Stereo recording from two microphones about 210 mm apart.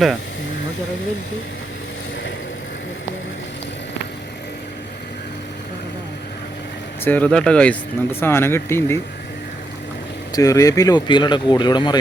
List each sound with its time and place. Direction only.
7.0 s speech: 10° left (ahead or behind)
10.3 s speech: 15° left (ahead or behind)